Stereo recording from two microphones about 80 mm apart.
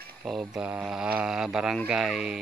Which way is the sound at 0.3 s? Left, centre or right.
Centre.